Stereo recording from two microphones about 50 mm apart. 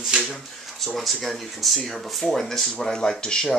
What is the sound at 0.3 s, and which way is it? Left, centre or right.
Speech, centre.